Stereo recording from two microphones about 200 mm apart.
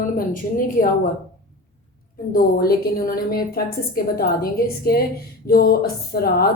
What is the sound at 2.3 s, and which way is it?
A woman's voice, 50° left (ahead or behind).